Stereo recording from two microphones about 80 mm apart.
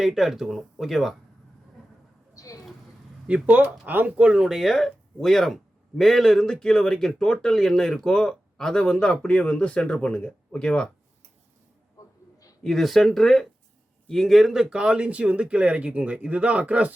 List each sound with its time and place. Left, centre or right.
0.0 s speech: centre
2.3 s a sound: left
3.2 s speech: centre
4.4 s speech: centre
12.6 s speech: centre